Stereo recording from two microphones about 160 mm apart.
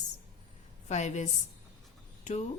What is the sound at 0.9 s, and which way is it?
Speech, 45° left (ahead or behind).